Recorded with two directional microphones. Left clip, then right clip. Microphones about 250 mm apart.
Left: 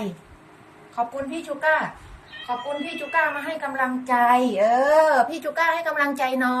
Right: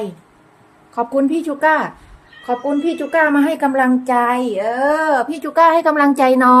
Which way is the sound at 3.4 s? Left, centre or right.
Right.